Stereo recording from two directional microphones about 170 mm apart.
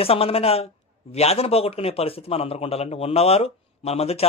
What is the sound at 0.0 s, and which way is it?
A man's voice, 35° left (ahead or behind).